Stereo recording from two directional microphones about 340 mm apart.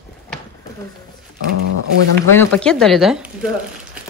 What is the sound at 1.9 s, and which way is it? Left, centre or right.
Speech, right.